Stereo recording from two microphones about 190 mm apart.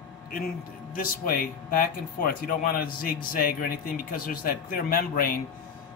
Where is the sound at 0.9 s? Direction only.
50° left (ahead or behind).